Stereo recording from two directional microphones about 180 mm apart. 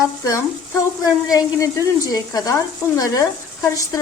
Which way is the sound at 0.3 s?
15° left (ahead or behind).